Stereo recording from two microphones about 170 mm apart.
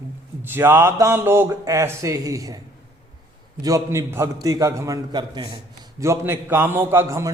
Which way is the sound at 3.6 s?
20° right (ahead or behind).